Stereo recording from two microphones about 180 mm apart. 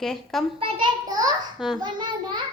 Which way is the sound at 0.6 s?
25° right (ahead or behind).